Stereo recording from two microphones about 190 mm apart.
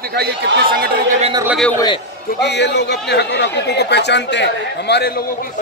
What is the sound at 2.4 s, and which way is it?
A man's voice, 65° left (ahead or behind).